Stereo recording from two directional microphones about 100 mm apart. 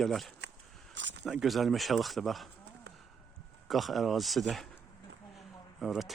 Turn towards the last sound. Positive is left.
turn(degrees=0)  # may be behind; listen again after turning